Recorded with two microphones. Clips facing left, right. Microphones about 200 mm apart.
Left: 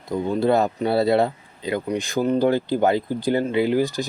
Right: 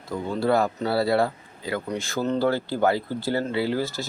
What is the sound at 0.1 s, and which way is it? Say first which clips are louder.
Speech: left 3 dB; 20° left (ahead or behind).